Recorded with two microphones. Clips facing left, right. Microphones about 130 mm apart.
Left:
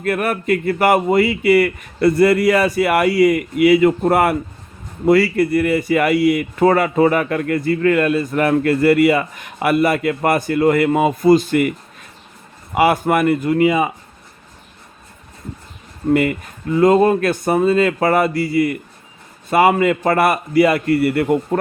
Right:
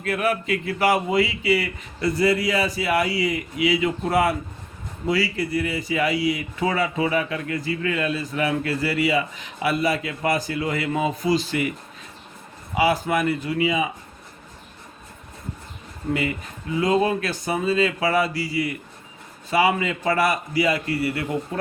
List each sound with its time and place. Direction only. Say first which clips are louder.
0.0 s speech: left 4 dB; 55° left (ahead or behind)
12.7 s speech: left 6 dB; 60° left (ahead or behind)
16.1 s speech: left 9 dB; 55° left (ahead or behind)